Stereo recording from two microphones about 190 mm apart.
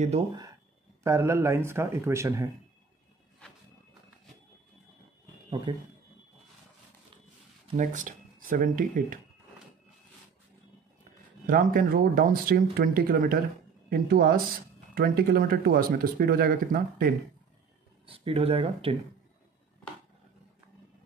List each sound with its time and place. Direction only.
1.0 s speech: 15° right (ahead or behind)
5.7 s speech: 30° right (ahead or behind)
7.7 s speech: 40° right (ahead or behind)
11.4 s speech: 50° right (ahead or behind)
18.0 s speech: 30° right (ahead or behind)